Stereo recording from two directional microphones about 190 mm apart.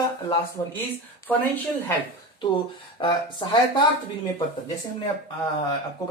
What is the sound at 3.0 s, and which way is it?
Speech, 25° left (ahead or behind).